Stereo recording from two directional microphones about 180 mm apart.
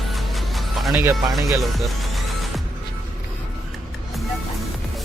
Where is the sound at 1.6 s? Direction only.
Centre (ahead or behind).